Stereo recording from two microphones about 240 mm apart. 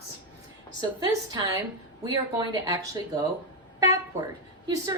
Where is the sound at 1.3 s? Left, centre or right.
Centre.